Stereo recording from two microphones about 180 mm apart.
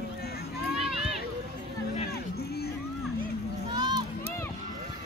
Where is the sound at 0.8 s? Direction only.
Centre (ahead or behind).